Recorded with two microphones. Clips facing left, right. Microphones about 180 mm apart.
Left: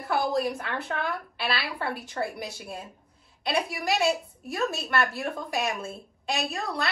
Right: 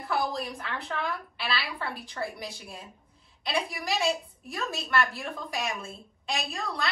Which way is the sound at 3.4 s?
60° left (ahead or behind).